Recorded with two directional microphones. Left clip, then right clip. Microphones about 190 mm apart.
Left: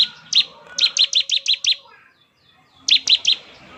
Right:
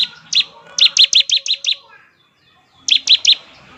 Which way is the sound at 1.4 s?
20° left (ahead or behind).